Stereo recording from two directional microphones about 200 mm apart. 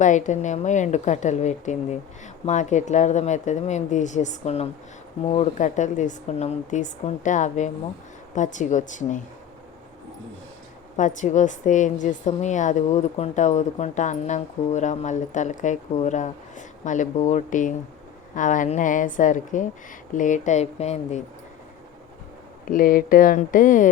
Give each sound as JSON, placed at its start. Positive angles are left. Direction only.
{"t": 0.0, "sound": "a woman's voice", "side_deg": 40}
{"t": 10.9, "sound": "a woman's voice", "side_deg": 40}
{"t": 22.6, "sound": "speech", "side_deg": 45}